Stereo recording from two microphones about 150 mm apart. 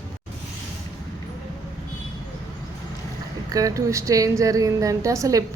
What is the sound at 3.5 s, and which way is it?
A woman's voice, 25° right (ahead or behind).